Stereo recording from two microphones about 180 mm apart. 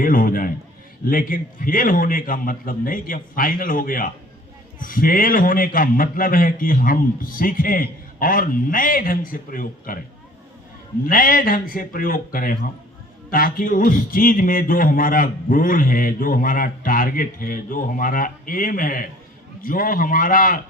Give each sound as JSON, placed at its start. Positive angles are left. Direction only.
{"t": 0.0, "sound": "a man's voice", "side_deg": 50}
{"t": 11.0, "sound": "a man's voice", "side_deg": 50}